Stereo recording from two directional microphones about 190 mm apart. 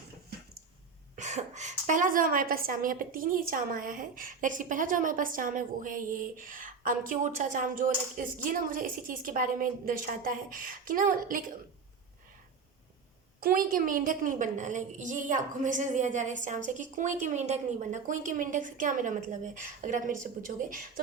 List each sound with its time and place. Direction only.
1.1 s a woman's voice: 35° right (ahead or behind)
13.4 s a woman's voice: 50° right (ahead or behind)